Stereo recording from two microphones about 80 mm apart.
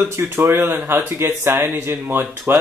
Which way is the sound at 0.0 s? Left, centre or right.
Right.